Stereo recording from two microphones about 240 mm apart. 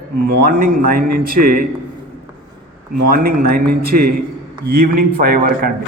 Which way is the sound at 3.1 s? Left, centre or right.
Right.